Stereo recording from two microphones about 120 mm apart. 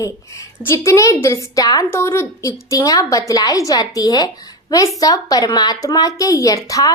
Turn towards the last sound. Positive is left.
turn(degrees=30)  # may be behind; listen again after turning